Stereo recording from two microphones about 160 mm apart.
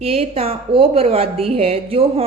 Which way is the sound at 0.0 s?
40° right (ahead or behind).